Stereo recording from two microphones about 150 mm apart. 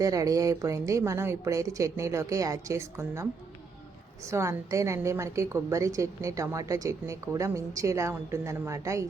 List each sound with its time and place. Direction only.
0.0 s a woman's voice: 25° right (ahead or behind)
4.3 s a woman's voice: 20° right (ahead or behind)